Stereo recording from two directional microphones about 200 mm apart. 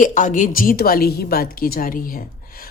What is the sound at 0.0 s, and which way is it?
A woman's voice, 40° left (ahead or behind).